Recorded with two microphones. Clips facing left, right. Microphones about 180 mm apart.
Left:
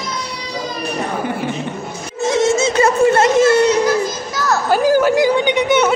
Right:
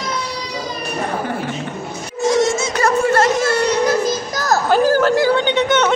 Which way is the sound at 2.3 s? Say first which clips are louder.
Left 1 dB; 20° left (ahead or behind).